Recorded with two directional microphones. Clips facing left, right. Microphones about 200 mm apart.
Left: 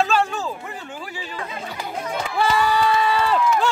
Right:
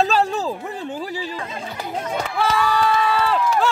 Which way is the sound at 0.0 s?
35° right (ahead or behind).